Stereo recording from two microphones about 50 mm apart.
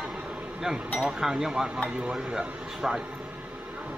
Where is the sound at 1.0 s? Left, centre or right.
Centre.